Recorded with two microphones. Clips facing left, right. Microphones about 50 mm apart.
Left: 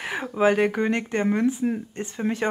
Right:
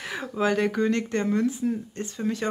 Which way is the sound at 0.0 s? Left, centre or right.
Left.